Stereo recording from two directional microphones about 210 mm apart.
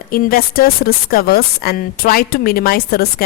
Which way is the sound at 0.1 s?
45° left (ahead or behind).